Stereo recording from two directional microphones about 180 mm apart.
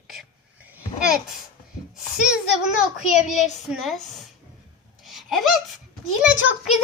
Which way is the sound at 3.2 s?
40° left (ahead or behind).